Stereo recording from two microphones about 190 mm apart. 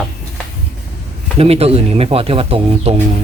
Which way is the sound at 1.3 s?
30° right (ahead or behind).